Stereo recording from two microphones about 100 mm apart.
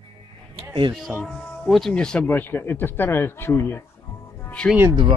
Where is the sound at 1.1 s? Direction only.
20° right (ahead or behind).